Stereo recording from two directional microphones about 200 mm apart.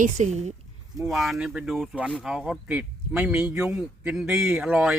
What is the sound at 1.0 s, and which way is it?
A man's voice, centre (ahead or behind).